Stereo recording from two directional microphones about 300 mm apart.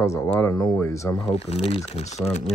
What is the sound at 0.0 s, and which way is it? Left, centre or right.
Speech, centre.